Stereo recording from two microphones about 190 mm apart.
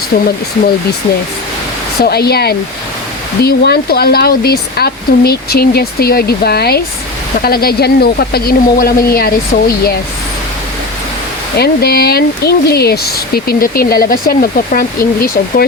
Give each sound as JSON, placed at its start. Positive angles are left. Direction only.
{"t": 2.0, "sound": "speech", "side_deg": 55}
{"t": 11.5, "sound": "speech", "side_deg": 55}